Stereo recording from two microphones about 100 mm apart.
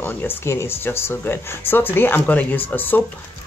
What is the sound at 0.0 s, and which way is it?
Speech, 20° left (ahead or behind).